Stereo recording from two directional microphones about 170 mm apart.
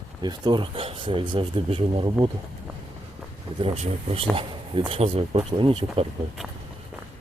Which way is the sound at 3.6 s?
35° right (ahead or behind).